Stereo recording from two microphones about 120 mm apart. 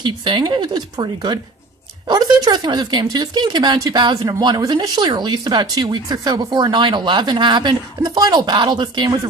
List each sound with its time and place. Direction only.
0.0 s speech: 40° right (ahead or behind)